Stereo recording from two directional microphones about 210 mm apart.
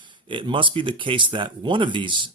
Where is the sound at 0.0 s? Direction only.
25° right (ahead or behind).